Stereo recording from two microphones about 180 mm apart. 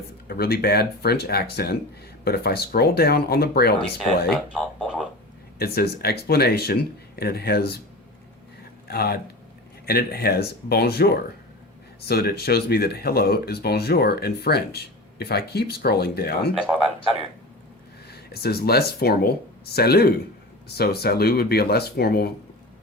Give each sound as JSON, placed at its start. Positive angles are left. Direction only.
{"t": 0.3, "sound": "speech", "side_deg": 60}
{"t": 4.3, "sound": "speech", "side_deg": 0}
{"t": 5.5, "sound": "speech", "side_deg": 60}
{"t": 8.9, "sound": "speech", "side_deg": 60}
{"t": 18.1, "sound": "speech", "side_deg": 60}